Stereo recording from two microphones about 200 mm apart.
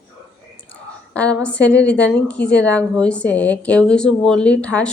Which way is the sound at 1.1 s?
5° left (ahead or behind).